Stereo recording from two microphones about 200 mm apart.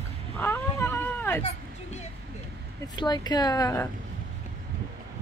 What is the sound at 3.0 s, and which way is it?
Speech, 20° left (ahead or behind).